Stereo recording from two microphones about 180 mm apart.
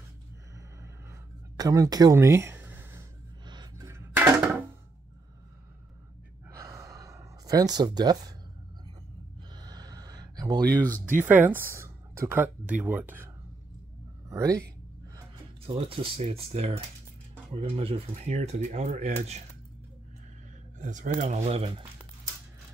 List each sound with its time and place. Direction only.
1.6 s speech: 20° right (ahead or behind)
3.4 s a sound: 20° right (ahead or behind)
6.5 s gasp: 15° right (ahead or behind)
9.6 s a sound: 20° right (ahead or behind)
11.1 s speech: 10° right (ahead or behind)
14.3 s speech: 20° right (ahead or behind)
15.6 s speech: 30° right (ahead or behind)
20.8 s speech: 45° right (ahead or behind)